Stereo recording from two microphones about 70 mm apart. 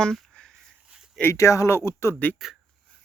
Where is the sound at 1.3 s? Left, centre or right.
Left.